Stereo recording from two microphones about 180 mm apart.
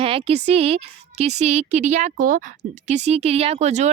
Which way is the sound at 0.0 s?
30° right (ahead or behind).